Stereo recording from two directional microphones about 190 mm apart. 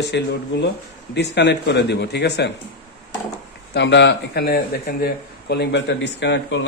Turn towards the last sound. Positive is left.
turn(degrees=70)  # may be behind; listen again after turning